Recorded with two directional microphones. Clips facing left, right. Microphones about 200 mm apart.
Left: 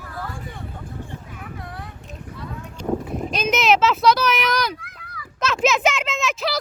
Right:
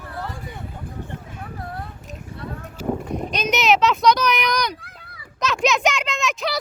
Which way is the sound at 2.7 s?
Centre (ahead or behind).